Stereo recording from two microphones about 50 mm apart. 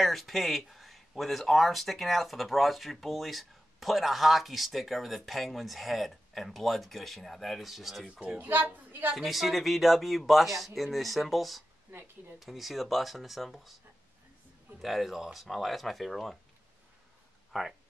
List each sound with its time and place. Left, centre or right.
0.0 s speech: centre
8.1 s a child's voice: right
8.5 s a woman's voice: right
9.1 s speech: centre
11.9 s speech: right
12.4 s speech: centre
14.8 s speech: centre
17.5 s speech: centre